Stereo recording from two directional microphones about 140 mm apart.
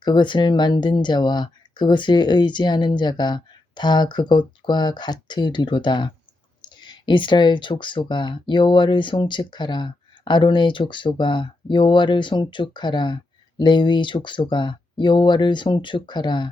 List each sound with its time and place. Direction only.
0.0 s speech: 30° left (ahead or behind)